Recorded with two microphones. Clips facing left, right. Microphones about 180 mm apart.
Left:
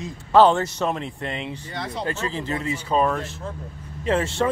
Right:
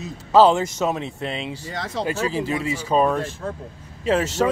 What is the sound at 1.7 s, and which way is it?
Speech, 90° right.